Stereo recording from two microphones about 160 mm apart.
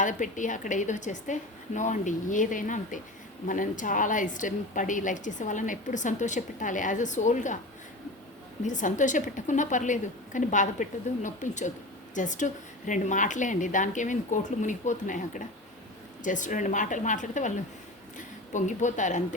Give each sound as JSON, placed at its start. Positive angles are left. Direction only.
{"t": 0.0, "sound": "a woman's voice", "side_deg": 50}
{"t": 8.6, "sound": "a woman's voice", "side_deg": 50}